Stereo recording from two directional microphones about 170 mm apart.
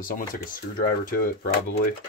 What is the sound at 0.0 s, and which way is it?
Speech, 55° left (ahead or behind).